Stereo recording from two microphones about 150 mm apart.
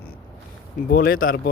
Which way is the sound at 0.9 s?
75° left (ahead or behind).